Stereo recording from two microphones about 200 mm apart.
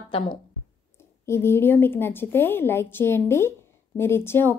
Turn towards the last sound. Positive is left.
turn(degrees=10)  # may be behind; listen again after turning